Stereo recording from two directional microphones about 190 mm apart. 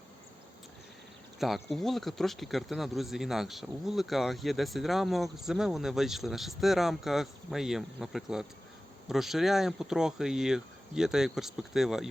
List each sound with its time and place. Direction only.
1.4 s speech: centre (ahead or behind)